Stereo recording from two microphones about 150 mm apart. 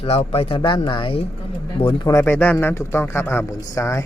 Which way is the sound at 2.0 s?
15° left (ahead or behind).